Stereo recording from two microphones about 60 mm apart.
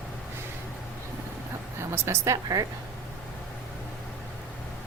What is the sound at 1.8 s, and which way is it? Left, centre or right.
Speech, right.